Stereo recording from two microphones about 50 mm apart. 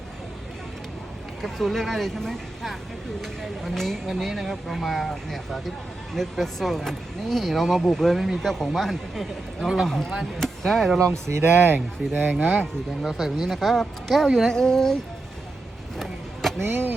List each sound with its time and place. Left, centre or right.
1.4 s speech: centre
11.1 s speech: right
11.4 s speech: right
13.1 s speech: centre
16.0 s a sound: centre
16.6 s speech: right